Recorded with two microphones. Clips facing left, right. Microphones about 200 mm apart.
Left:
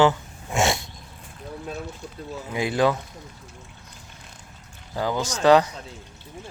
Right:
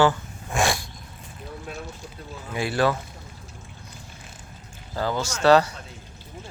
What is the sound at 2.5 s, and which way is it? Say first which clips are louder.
Speech: left 1 dB; 20° left (ahead or behind).